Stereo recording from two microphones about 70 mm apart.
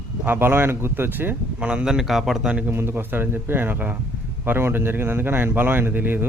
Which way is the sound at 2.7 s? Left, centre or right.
Right.